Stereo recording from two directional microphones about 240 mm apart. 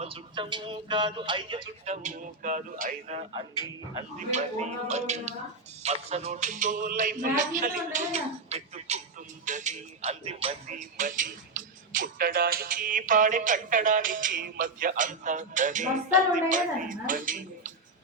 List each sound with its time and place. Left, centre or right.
0.0 s speech: right
5.8 s music: right